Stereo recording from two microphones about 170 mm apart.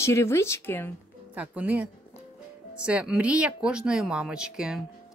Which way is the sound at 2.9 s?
5° right (ahead or behind).